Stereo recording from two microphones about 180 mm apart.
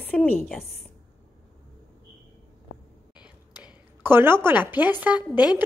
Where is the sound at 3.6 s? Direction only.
10° right (ahead or behind).